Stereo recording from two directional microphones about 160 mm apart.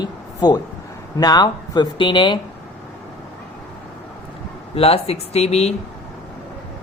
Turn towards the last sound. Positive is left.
turn(degrees=40)  # may be behind; listen again after turning